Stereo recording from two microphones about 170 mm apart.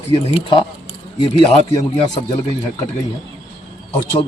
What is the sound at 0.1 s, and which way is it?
A man's voice, 30° left (ahead or behind).